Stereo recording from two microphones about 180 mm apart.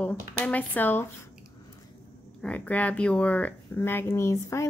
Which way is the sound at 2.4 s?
10° left (ahead or behind).